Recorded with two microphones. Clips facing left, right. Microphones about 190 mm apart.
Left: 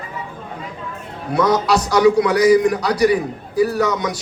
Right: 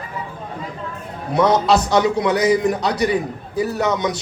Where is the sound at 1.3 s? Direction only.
25° right (ahead or behind).